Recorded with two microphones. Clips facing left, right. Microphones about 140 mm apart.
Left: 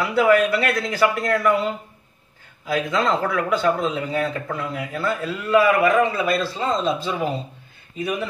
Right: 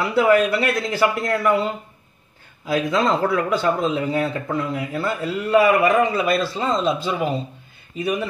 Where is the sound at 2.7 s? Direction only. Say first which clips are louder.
Right 2 dB; 30° right (ahead or behind).